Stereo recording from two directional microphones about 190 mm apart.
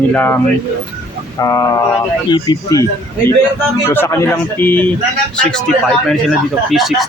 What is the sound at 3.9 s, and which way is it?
Speech, 15° left (ahead or behind).